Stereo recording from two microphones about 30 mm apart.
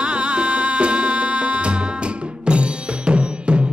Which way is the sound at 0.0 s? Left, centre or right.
Right.